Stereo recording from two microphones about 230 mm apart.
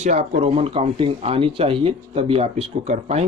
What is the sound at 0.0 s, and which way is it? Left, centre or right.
Speech, right.